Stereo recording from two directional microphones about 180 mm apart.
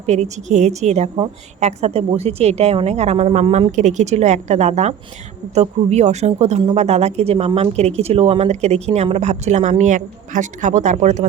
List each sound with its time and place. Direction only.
0.0 s a woman's voice: 40° right (ahead or behind)